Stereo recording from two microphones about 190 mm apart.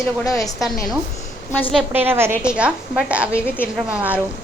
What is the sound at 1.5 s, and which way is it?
Speech, 10° left (ahead or behind).